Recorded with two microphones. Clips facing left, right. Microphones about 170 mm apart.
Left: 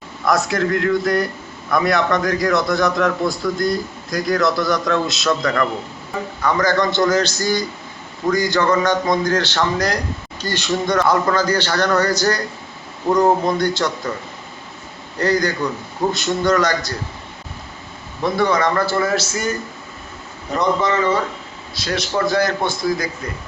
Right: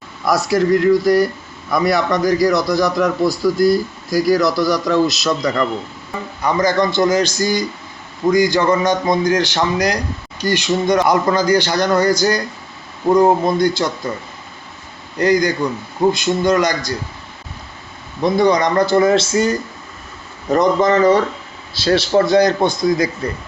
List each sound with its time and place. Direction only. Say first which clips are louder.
0.3 s a man's voice: right 3 dB; centre (ahead or behind)
5.4 s a man's voice: right 1 dB; 20° right (ahead or behind)
15.2 s a man's voice: right 3 dB; 15° right (ahead or behind)
18.2 s a man's voice: right 4 dB; 15° right (ahead or behind); by 19.5 s 30° right (ahead or behind)
20.6 s speech: right 5 dB; 40° right (ahead or behind)
22.3 s speech: right 6 dB; 20° right (ahead or behind)